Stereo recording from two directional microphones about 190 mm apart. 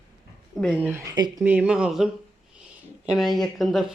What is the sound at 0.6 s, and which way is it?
Speech, 5° left (ahead or behind).